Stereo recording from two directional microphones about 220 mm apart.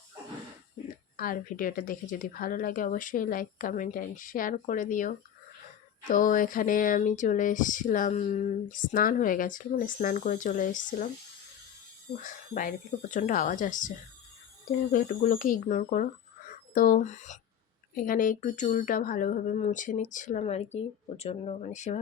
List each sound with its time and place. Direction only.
1.1 s speech: 40° left (ahead or behind)
12.2 s speech: 35° left (ahead or behind)